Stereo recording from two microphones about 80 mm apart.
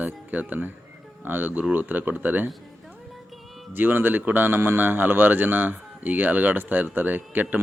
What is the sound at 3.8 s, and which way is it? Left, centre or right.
A man's voice, right.